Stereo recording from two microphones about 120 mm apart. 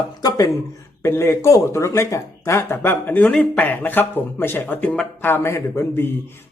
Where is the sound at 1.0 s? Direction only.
20° left (ahead or behind).